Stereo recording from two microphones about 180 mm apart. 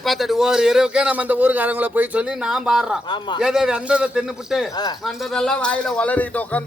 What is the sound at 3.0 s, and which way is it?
Speech, 25° left (ahead or behind).